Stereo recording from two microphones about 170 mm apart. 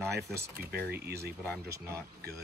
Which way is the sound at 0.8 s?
65° right (ahead or behind).